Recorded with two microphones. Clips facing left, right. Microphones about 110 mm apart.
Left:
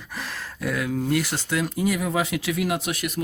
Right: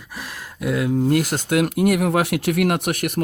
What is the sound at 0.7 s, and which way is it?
Speech, 25° right (ahead or behind).